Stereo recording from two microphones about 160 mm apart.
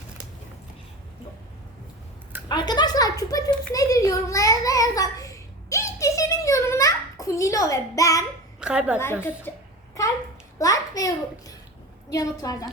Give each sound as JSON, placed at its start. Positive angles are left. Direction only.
{"t": 2.5, "sound": "a woman's voice", "side_deg": 25}
{"t": 3.7, "sound": "a sound", "side_deg": 20}
{"t": 8.6, "sound": "a woman's voice", "side_deg": -5}
{"t": 9.5, "sound": "a child's voice", "side_deg": 10}
{"t": 10.0, "sound": "a sound", "side_deg": 20}
{"t": 10.6, "sound": "a child's voice", "side_deg": 20}